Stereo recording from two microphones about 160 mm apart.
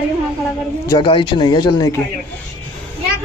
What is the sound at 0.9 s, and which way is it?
Speech, 30° left (ahead or behind).